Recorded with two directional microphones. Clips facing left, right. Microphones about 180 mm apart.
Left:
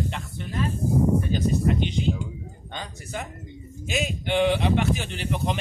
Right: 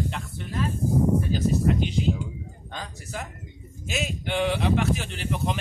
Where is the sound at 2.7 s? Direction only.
Centre (ahead or behind).